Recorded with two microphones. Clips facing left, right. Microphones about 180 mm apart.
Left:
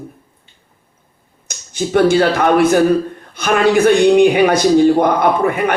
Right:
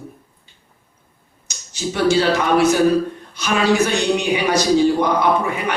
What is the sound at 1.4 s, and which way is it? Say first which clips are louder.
A man's voice: left 4 dB; 55° left (ahead or behind).